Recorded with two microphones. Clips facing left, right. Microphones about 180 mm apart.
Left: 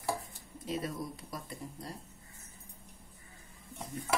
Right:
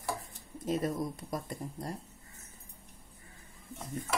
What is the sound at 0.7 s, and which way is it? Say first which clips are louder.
A woman's voice: right 5 dB; 45° right (ahead or behind).